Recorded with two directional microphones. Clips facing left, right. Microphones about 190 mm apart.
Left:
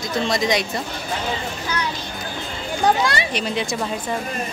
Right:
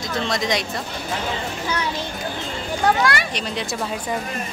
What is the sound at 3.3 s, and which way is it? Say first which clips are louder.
Speech: left 3 dB; 5° left (ahead or behind).